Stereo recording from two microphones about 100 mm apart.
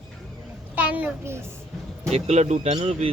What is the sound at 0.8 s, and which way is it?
Speech, 15° right (ahead or behind).